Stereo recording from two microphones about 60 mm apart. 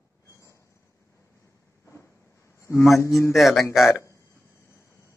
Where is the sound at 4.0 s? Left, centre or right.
Left.